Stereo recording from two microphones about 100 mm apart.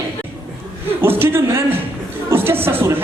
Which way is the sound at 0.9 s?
25° right (ahead or behind).